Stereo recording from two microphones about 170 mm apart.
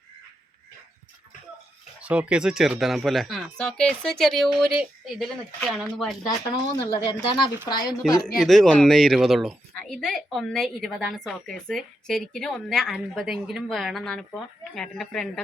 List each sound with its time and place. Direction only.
2.0 s a woman's voice: 5° right (ahead or behind)
6.9 s a woman's voice: 30° left (ahead or behind)
8.4 s a woman's voice: centre (ahead or behind)